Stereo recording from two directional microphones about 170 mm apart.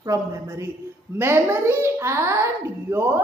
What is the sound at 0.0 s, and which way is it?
A child's voice, 15° right (ahead or behind).